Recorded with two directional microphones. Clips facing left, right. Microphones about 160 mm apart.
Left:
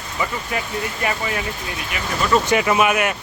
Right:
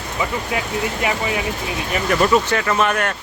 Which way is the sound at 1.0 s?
15° right (ahead or behind).